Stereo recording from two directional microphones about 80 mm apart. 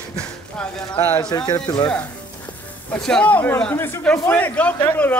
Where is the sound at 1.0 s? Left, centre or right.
Left.